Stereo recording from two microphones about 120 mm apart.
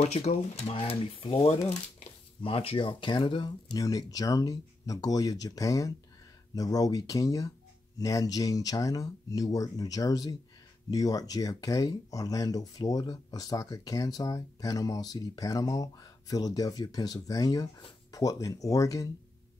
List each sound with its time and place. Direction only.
0.0 s speech: 65° left (ahead or behind); by 19.0 s 30° left (ahead or behind)